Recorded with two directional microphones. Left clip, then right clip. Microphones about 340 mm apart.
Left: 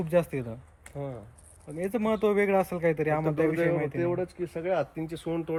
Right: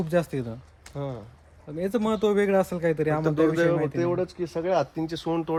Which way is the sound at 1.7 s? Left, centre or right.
Centre.